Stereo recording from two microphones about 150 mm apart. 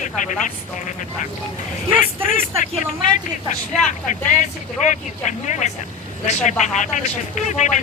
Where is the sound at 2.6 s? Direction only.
55° left (ahead or behind).